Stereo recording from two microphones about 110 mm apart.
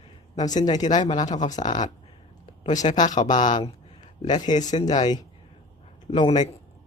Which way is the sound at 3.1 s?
40° left (ahead or behind).